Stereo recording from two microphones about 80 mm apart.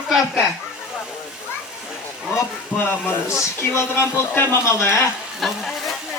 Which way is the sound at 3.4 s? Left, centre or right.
Left.